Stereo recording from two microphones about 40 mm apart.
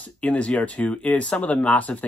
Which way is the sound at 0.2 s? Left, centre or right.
Left.